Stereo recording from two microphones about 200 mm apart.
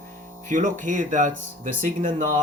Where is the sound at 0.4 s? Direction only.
40° right (ahead or behind).